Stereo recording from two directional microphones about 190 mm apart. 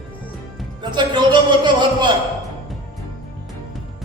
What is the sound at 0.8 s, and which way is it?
A man's voice, 25° right (ahead or behind).